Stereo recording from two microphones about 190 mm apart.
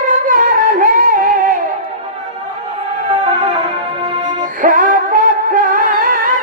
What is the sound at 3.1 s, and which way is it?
Music, 30° right (ahead or behind).